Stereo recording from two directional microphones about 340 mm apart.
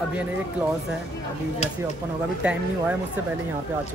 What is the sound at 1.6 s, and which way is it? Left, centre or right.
Speech, centre.